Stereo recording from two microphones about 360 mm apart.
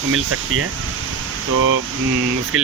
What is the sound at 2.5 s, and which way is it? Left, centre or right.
Speech, right.